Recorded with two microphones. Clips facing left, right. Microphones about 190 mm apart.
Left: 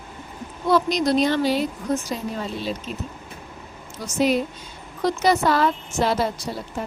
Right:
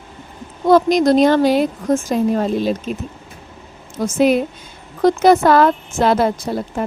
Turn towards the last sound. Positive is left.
turn(degrees=-55)  # may be behind; listen again after turning